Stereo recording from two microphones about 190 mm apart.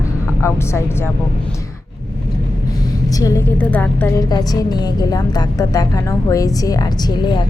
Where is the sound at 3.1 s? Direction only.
15° left (ahead or behind).